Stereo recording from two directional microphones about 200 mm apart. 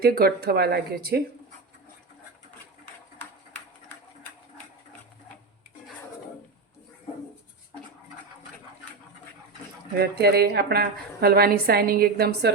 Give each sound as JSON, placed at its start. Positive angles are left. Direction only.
{"t": 0.0, "sound": "a woman's voice", "side_deg": -50}
{"t": 9.9, "sound": "a woman's voice", "side_deg": -55}